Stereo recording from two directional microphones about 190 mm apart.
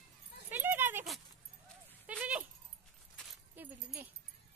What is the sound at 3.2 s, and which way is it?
Keys jangling, centre (ahead or behind).